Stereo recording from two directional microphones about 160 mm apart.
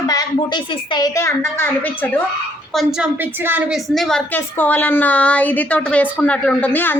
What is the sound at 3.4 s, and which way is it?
Speech, 15° right (ahead or behind).